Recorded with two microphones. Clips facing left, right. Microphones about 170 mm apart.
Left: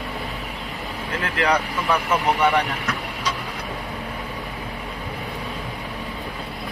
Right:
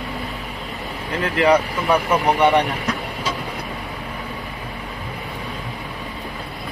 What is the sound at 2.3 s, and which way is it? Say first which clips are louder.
Speech: right 4 dB; 20° right (ahead or behind).